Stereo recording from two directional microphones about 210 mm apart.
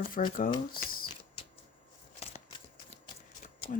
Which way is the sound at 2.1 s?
30° left (ahead or behind).